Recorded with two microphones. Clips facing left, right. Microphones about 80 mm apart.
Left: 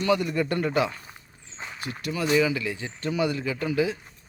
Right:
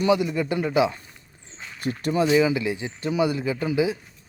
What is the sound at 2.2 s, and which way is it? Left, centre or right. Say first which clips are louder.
Speech: right 1 dB; centre.